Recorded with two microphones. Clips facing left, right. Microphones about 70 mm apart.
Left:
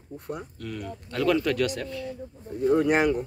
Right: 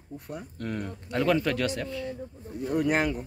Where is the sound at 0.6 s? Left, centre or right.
Right.